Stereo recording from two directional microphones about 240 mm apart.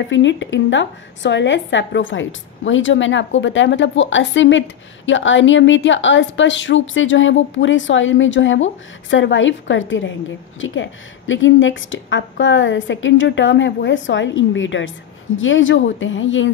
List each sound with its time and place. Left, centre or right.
0.1 s speech: left